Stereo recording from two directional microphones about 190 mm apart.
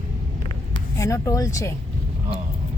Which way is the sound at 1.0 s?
15° left (ahead or behind).